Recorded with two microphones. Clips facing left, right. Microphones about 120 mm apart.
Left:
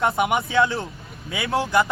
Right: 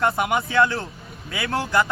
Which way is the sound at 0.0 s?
20° left (ahead or behind).